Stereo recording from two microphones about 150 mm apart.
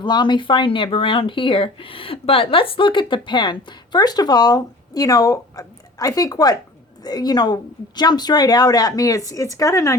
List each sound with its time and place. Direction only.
0.0 s a woman's voice: 30° left (ahead or behind)